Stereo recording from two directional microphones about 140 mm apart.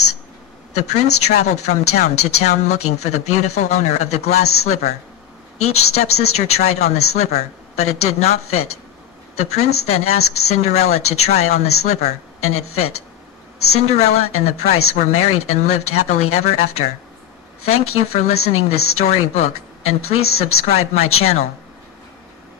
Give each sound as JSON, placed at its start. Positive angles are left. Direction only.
{"t": 0.7, "sound": "speech", "side_deg": 55}
{"t": 17.6, "sound": "speech", "side_deg": 50}